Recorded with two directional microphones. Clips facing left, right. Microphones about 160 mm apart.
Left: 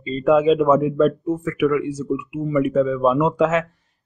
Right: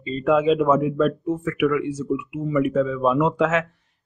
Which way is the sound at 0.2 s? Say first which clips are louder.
Left 3 dB; 35° left (ahead or behind).